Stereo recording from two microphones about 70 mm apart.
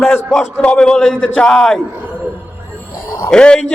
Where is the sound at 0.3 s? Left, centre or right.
Centre.